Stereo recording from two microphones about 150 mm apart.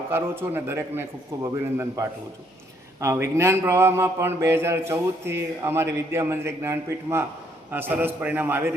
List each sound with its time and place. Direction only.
0.1 s a man's voice: 15° right (ahead or behind)